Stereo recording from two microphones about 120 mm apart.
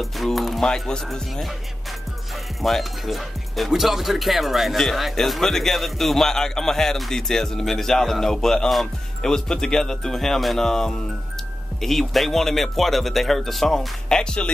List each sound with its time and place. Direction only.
0.0 s speech: centre (ahead or behind)
2.6 s speech: centre (ahead or behind)